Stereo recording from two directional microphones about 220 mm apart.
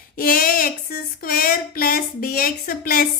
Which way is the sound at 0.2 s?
40° left (ahead or behind).